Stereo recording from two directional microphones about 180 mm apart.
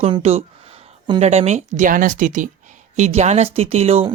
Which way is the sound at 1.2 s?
35° right (ahead or behind).